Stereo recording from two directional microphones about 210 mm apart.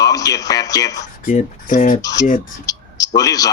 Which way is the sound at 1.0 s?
35° left (ahead or behind).